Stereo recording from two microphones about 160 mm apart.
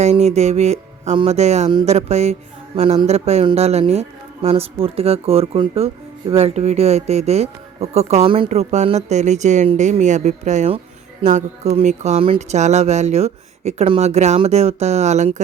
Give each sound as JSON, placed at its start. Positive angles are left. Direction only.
{"t": 0.0, "sound": "speech", "side_deg": -45}